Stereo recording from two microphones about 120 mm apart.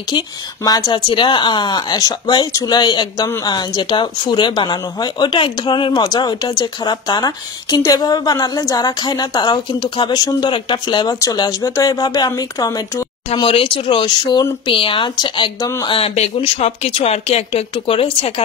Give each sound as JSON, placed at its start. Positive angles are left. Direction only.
{"t": 0.7, "sound": "a woman's voice", "side_deg": 35}
{"t": 13.4, "sound": "speech", "side_deg": 45}